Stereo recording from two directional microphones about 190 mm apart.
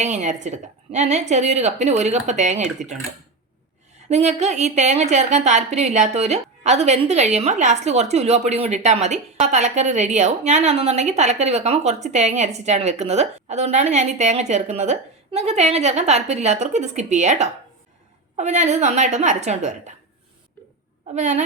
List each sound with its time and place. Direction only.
0.0 s a woman's voice: 40° right (ahead or behind)
4.1 s a woman's voice: 35° right (ahead or behind)
21.2 s a woman's voice: 40° right (ahead or behind)